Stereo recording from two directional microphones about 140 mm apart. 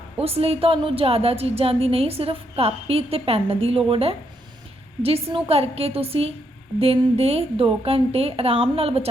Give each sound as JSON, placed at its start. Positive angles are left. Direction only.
{"t": 0.2, "sound": "a woman's voice", "side_deg": -45}